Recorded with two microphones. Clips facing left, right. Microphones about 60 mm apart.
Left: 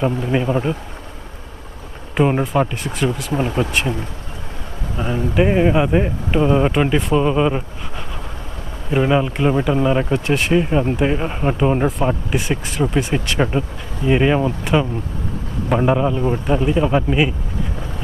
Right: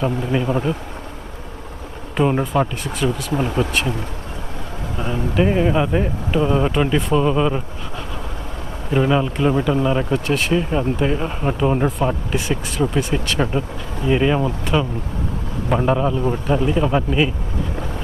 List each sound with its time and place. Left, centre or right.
0.3 s speech: centre
2.1 s speech: centre
2.4 s speech: centre
3.3 s speech: left
3.6 s speech: centre
5.1 s speech: left
8.9 s speech: centre
10.5 s speech: centre
12.5 s speech: centre
13.4 s speech: centre